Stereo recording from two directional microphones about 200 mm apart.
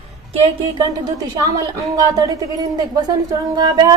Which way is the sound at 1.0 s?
20° right (ahead or behind).